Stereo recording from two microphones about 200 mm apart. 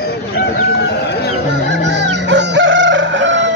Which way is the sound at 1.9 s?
60° right (ahead or behind).